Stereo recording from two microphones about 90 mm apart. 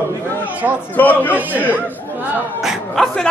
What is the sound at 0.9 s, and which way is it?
Speech, 20° left (ahead or behind).